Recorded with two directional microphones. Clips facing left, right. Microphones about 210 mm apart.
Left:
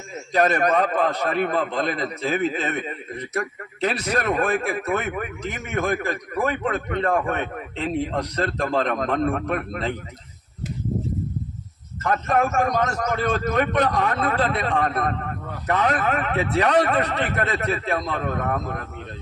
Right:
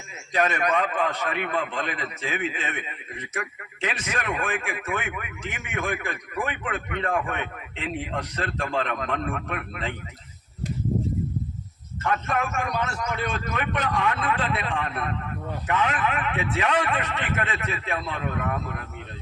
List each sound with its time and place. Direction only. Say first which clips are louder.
0.3 s a man's voice: left 5 dB; 40° left (ahead or behind)
12.0 s a man's voice: left 5 dB; 40° left (ahead or behind)